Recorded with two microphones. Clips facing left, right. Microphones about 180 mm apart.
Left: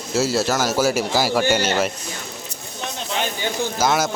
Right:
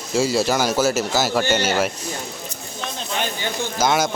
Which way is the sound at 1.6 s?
10° right (ahead or behind).